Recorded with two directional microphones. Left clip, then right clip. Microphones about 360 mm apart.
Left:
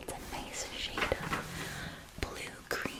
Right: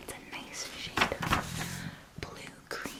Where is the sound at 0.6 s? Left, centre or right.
Centre.